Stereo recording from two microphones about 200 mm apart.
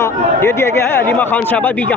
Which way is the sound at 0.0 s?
15° left (ahead or behind).